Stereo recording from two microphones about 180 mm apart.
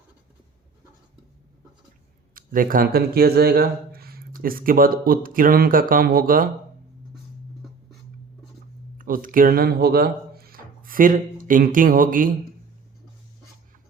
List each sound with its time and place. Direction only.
2.3 s speech: 50° right (ahead or behind)
9.0 s speech: 50° right (ahead or behind)